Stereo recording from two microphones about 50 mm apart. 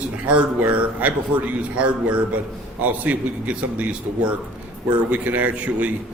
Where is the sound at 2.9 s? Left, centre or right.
Right.